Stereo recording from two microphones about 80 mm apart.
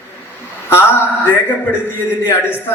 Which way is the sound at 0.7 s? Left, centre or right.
Left.